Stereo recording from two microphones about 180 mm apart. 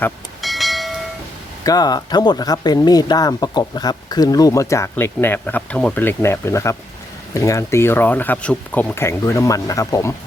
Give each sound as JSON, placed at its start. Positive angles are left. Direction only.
{"t": 0.4, "sound": "train", "side_deg": 0}
{"t": 1.6, "sound": "speech", "side_deg": 20}